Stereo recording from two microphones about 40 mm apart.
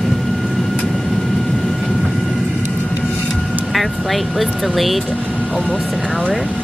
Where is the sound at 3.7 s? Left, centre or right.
Centre.